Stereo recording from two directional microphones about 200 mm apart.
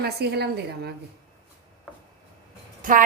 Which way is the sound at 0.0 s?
55° right (ahead or behind).